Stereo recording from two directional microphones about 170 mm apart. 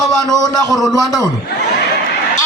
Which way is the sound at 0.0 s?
Centre (ahead or behind).